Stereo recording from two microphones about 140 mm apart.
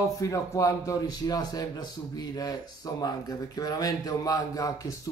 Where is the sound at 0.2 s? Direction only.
25° left (ahead or behind).